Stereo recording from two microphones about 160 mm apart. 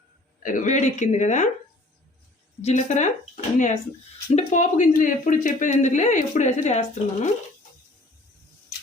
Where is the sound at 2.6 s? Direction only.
50° left (ahead or behind).